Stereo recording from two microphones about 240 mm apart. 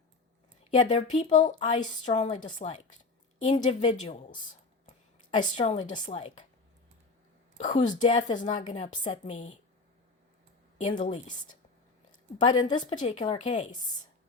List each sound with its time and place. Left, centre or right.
0.8 s a woman's voice: left
7.6 s a woman's voice: left
10.8 s speech: left
12.5 s a woman's voice: left